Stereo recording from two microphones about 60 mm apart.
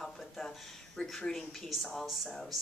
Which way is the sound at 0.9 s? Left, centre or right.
Centre.